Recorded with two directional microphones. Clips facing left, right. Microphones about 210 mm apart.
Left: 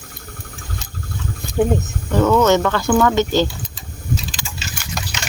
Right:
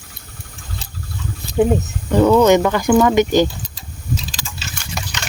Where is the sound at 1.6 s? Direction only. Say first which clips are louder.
Right 2 dB; 10° right (ahead or behind).